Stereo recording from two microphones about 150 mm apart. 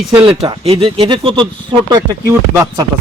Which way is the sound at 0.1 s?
35° right (ahead or behind).